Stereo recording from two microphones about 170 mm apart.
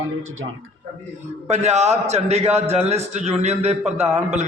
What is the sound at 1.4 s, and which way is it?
A man's voice, 40° right (ahead or behind).